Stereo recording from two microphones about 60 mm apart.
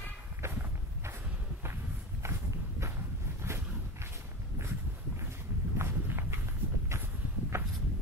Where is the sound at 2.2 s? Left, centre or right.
Right.